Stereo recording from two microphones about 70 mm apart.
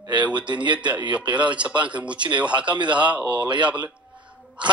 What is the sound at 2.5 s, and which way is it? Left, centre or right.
Speech, right.